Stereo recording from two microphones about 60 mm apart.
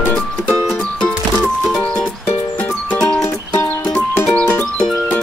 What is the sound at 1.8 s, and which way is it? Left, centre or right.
Music, centre.